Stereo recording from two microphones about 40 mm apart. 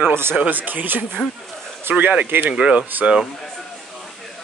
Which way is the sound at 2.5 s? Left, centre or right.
Right.